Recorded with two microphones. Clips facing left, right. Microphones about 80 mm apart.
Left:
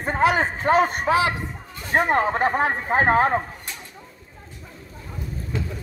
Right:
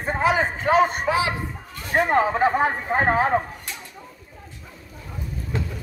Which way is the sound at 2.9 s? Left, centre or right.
Left.